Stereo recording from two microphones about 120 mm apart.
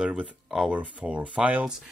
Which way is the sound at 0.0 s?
10° right (ahead or behind).